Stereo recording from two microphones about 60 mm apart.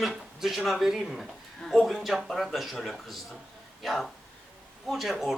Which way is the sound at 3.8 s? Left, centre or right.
Centre.